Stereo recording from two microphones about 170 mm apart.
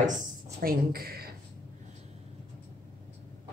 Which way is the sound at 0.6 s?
60° right (ahead or behind).